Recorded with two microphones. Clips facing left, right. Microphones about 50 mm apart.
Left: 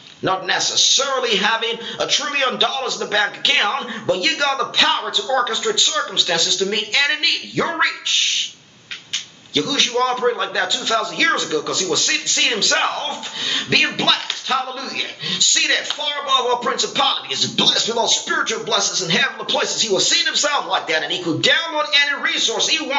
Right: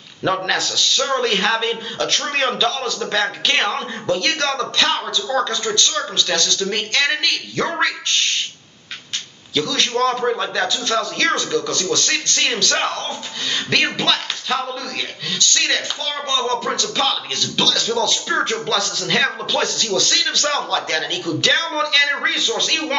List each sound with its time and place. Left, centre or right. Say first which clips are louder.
0.2 s a man's voice: even; centre
9.5 s a man's voice: even; centre